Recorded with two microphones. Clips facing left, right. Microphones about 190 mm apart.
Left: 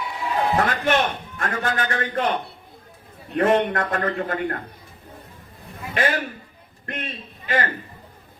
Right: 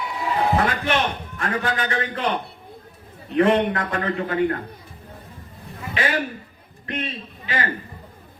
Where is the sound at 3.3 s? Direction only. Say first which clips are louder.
Right 1 dB; 45° left (ahead or behind).